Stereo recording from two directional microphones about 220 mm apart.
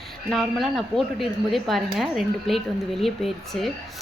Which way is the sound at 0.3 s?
Centre (ahead or behind).